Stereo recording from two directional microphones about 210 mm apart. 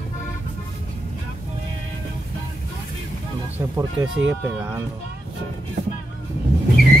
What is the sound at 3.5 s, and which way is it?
Speech, 10° right (ahead or behind).